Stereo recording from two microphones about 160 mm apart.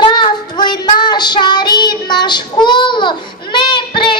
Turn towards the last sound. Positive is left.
turn(degrees=30)  # may be behind; listen again after turning